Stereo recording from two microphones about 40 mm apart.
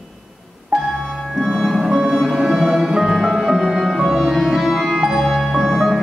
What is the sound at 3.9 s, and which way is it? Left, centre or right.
Music, centre.